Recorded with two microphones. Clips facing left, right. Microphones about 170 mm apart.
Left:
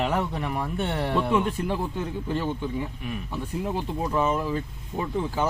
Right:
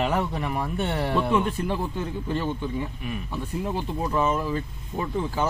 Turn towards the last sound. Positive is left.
turn(degrees=15)  # may be behind; listen again after turning